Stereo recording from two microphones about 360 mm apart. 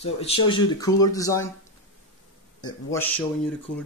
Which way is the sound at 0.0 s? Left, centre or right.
Centre.